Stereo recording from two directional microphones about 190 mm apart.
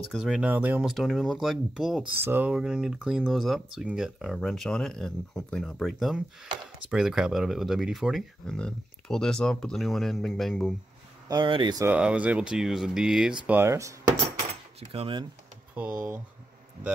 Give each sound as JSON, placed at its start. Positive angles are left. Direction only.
{"t": 0.1, "sound": "speech", "side_deg": -5}
{"t": 11.2, "sound": "speech", "side_deg": -25}
{"t": 11.8, "sound": "speech", "side_deg": -5}
{"t": 14.8, "sound": "speech", "side_deg": -30}
{"t": 15.7, "sound": "speech", "side_deg": -10}